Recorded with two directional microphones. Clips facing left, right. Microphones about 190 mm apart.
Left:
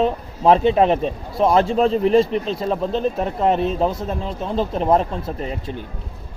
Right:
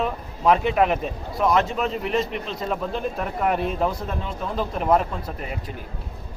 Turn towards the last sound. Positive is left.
turn(degrees=30)  # may be behind; listen again after turning